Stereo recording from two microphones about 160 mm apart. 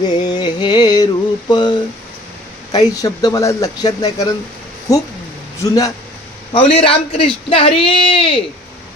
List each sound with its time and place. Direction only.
0.2 s a sound: 25° left (ahead or behind)
2.7 s speech: 25° left (ahead or behind)
6.5 s speech: 35° left (ahead or behind)